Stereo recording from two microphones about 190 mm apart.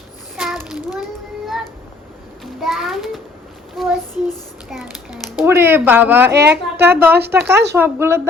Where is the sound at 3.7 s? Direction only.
Centre (ahead or behind).